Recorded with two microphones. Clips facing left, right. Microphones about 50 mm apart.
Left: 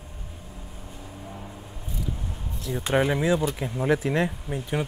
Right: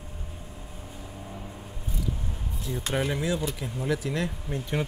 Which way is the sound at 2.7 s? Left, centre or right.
Left.